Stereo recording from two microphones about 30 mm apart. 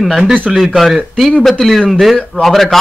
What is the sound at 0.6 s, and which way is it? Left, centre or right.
A man's voice, centre.